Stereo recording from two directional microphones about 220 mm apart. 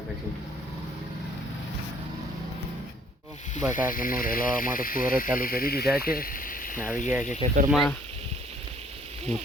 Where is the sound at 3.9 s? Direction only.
40° left (ahead or behind).